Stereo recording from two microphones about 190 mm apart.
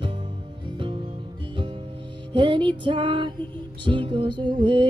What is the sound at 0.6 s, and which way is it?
Music, 25° right (ahead or behind).